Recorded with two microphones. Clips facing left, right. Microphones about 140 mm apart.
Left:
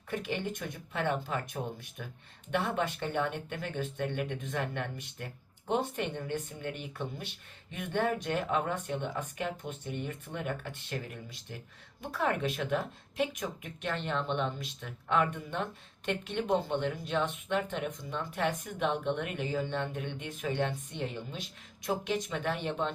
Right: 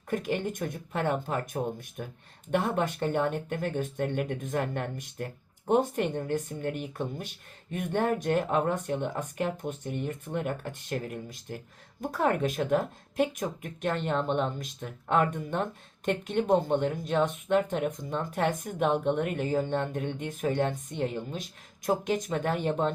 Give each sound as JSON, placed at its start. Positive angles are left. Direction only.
{"t": 0.1, "sound": "speech", "side_deg": -45}